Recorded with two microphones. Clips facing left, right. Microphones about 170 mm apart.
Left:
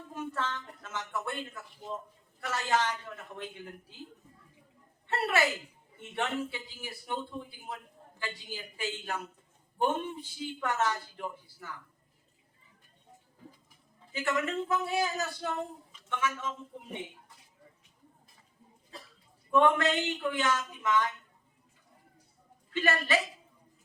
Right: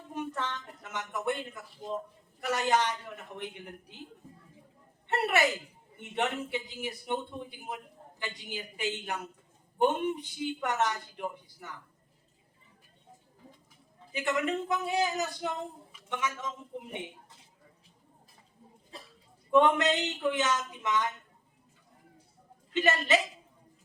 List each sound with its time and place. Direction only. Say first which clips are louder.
0.1 s a sound: right 1 dB; 20° right (ahead or behind)
2.5 s speech: right 2 dB; 15° right (ahead or behind)
5.0 s a woman's voice: right 1 dB; 20° right (ahead or behind)
14.1 s speech: right 1 dB; 20° right (ahead or behind)
19.5 s speech: right 1 dB; 20° right (ahead or behind)
22.7 s speech: right 2 dB; 20° right (ahead or behind)